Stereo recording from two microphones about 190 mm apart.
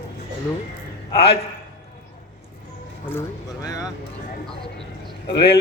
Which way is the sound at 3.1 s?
15° left (ahead or behind).